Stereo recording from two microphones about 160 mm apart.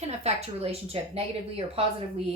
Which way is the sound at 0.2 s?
40° right (ahead or behind).